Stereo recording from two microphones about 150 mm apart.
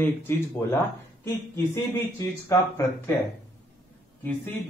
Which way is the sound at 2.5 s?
20° left (ahead or behind).